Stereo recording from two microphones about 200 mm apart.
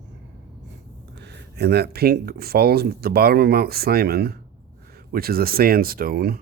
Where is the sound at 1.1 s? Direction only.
55° right (ahead or behind).